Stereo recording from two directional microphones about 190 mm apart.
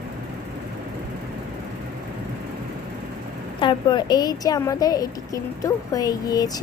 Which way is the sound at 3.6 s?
20° left (ahead or behind).